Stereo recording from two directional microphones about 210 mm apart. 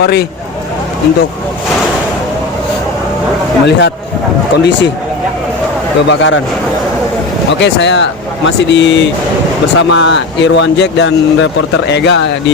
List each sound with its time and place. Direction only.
0.0 s speech: 50° left (ahead or behind)
3.7 s speech: 55° left (ahead or behind)
6.1 s speech: 60° left (ahead or behind)
7.6 s speech: 55° left (ahead or behind)